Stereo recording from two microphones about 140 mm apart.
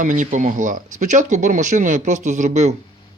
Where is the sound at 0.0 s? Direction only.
65° right (ahead or behind).